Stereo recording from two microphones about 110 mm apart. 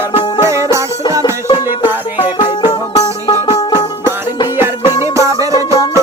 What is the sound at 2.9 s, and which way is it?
Music, 40° left (ahead or behind).